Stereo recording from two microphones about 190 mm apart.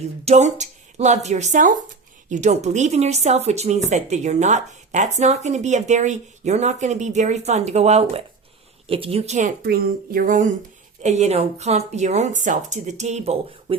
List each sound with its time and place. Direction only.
0.3 s a woman's voice: 35° right (ahead or behind)
9.6 s a woman's voice: 50° right (ahead or behind); by 13.7 s 35° right (ahead or behind)